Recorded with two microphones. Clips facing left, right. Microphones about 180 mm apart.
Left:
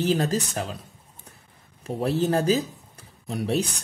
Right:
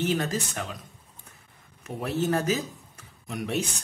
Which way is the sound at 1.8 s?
30° left (ahead or behind).